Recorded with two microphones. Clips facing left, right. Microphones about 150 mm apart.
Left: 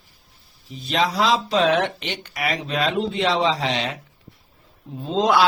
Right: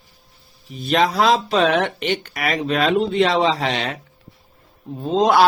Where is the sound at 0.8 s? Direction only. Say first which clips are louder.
Right 4 dB; 55° right (ahead or behind).